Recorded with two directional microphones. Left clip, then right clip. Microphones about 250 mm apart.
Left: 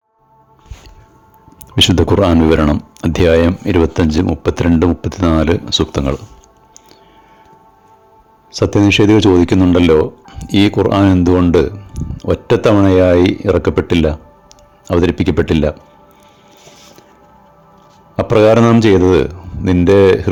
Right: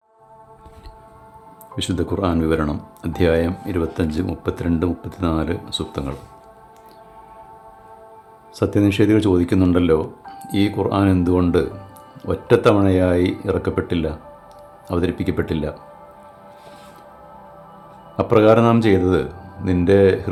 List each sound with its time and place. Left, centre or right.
1.7 s speech: left
8.5 s speech: left
18.2 s speech: left